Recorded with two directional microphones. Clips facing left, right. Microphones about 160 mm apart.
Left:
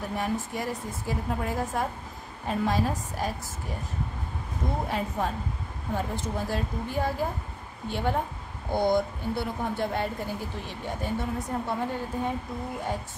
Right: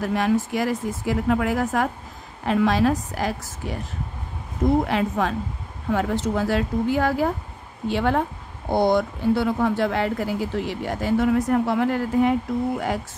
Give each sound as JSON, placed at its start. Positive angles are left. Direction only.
{"t": 0.0, "sound": "speech", "side_deg": -90}
{"t": 4.8, "sound": "speech", "side_deg": -90}
{"t": 8.6, "sound": "speech", "side_deg": -80}